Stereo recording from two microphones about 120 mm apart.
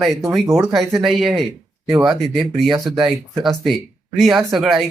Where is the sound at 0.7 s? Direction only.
Centre (ahead or behind).